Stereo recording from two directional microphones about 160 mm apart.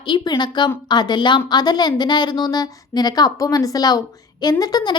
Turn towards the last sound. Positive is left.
turn(degrees=25)  # may be behind; listen again after turning